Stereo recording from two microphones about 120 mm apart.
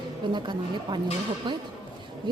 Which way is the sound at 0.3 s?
40° right (ahead or behind).